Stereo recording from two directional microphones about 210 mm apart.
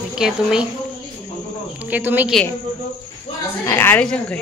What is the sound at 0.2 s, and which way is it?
Speech, 5° right (ahead or behind).